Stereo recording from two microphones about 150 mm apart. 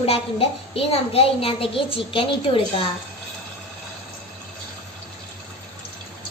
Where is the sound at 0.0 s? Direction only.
40° left (ahead or behind).